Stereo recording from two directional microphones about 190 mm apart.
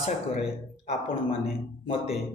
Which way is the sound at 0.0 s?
35° left (ahead or behind).